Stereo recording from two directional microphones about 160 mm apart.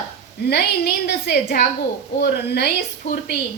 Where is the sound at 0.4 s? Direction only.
90° left.